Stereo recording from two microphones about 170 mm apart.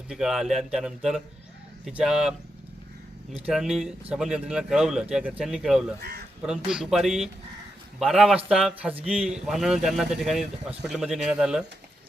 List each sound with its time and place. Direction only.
0.1 s speech: 5° right (ahead or behind)
3.3 s speech: 5° right (ahead or behind)
6.0 s speech: 70° right (ahead or behind)
6.7 s a man's voice: 5° right (ahead or behind)